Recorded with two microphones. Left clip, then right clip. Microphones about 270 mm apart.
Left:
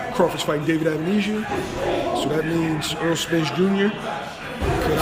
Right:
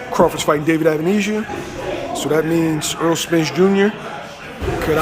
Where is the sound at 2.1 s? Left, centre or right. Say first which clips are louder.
Right 3 dB; centre.